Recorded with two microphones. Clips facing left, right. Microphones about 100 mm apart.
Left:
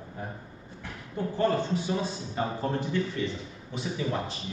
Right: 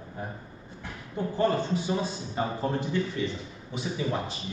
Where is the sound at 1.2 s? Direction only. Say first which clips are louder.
Right 1 dB; 20° right (ahead or behind).